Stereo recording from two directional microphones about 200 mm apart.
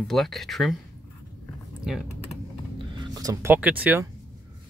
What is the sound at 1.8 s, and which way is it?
Speech, 5° right (ahead or behind).